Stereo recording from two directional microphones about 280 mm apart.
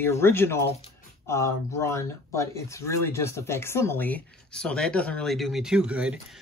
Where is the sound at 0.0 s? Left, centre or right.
Centre.